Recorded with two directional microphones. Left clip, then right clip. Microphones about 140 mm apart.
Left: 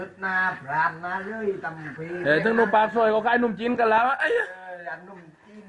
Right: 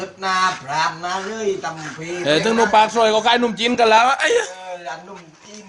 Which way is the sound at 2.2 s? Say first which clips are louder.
Right 4 dB; 20° right (ahead or behind).